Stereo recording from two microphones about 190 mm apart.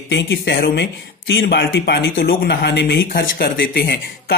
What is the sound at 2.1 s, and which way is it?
Speech, 55° left (ahead or behind).